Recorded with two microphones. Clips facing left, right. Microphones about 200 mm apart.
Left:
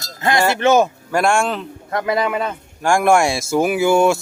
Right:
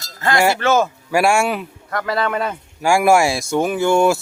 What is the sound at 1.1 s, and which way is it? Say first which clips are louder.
Speech: right 2 dB; 10° right (ahead or behind).